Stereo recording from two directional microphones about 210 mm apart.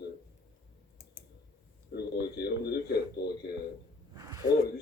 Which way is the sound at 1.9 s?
50° left (ahead or behind).